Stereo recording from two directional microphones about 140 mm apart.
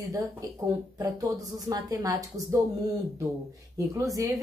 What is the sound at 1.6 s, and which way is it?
Speech, 25° right (ahead or behind).